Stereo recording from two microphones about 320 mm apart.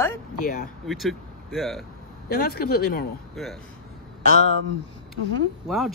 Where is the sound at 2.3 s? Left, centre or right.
Left.